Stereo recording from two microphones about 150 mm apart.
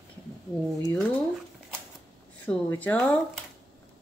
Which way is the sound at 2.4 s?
10° left (ahead or behind).